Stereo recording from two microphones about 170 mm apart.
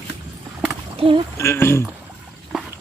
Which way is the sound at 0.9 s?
35° right (ahead or behind).